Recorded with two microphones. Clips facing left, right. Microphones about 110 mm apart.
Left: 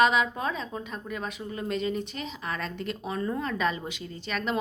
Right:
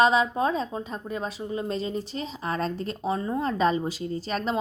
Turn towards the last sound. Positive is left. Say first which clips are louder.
# right 4 dB
turn(degrees=-35)  # may be behind; listen again after turning